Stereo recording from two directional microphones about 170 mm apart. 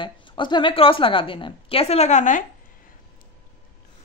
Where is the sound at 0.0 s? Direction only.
30° left (ahead or behind); by 2.4 s 45° left (ahead or behind).